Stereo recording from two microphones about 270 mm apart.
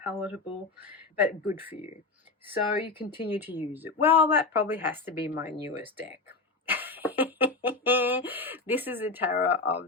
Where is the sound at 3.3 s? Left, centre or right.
Centre.